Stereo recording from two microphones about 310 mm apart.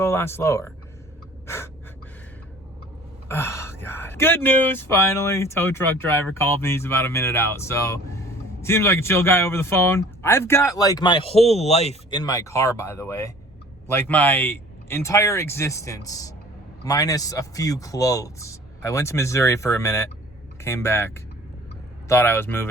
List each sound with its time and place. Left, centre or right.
0.0 s speech: centre
1.5 s gasp: centre
3.2 s speech: centre